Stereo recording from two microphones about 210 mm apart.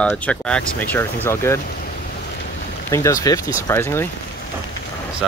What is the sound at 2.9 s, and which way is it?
Speech, 15° left (ahead or behind).